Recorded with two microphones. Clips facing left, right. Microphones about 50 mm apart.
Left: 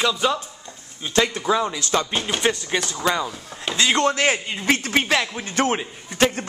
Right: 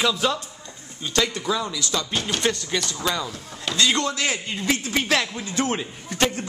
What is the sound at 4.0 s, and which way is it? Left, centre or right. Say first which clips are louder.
Speech: left 6 dB; left.